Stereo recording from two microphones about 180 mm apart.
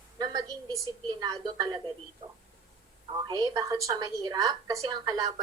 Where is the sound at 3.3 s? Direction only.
20° right (ahead or behind).